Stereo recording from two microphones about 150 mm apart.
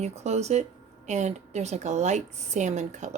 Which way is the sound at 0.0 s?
45° right (ahead or behind).